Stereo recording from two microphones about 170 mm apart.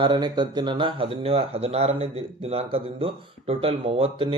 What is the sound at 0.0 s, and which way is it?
Speech, 25° right (ahead or behind).